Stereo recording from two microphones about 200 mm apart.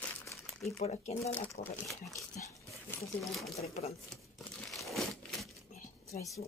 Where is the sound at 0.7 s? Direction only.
30° left (ahead or behind).